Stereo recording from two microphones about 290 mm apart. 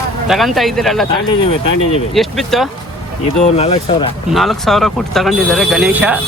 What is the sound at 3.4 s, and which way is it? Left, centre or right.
Speech, left.